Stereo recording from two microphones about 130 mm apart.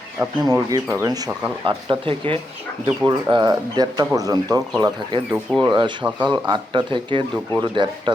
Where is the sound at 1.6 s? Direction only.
40° right (ahead or behind).